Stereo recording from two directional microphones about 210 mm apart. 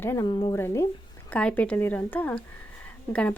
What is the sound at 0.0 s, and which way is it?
Speech, 10° left (ahead or behind).